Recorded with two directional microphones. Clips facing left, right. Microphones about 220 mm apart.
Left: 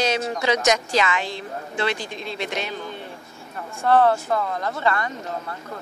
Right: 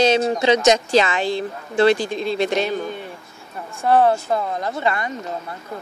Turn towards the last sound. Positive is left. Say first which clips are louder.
# right 1 dB
turn(degrees=-15)  # may be behind; listen again after turning